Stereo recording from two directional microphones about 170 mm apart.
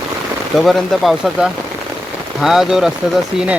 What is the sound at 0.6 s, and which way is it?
Speech, centre (ahead or behind).